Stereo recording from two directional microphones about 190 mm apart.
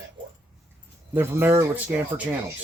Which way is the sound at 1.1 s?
10° right (ahead or behind).